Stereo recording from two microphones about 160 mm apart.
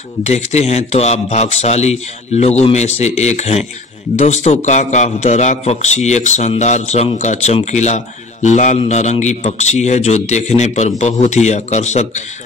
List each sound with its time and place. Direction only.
0.2 s a man's voice: 45° left (ahead or behind)